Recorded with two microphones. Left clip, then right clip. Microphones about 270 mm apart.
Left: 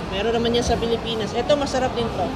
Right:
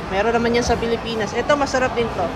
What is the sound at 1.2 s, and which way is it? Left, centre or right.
Speech, centre.